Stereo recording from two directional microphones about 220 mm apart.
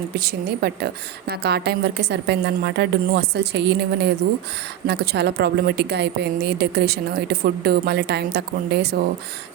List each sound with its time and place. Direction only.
0.2 s a woman's voice: 45° right (ahead or behind)